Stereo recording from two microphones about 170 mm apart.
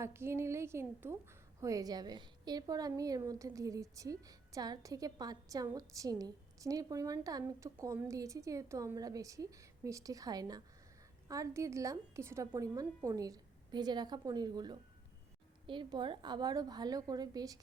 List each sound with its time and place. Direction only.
0.0 s a woman's voice: 15° right (ahead or behind)